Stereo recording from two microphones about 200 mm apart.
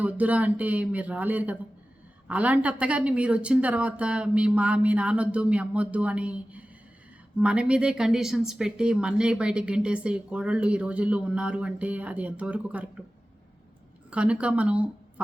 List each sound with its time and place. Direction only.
0.0 s a woman's voice: 5° right (ahead or behind)
14.1 s a woman's voice: 5° right (ahead or behind)